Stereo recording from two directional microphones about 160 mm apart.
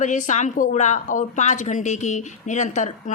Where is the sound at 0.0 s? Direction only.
50° left (ahead or behind).